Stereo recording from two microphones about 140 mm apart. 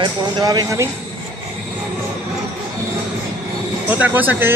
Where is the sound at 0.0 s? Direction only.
30° right (ahead or behind).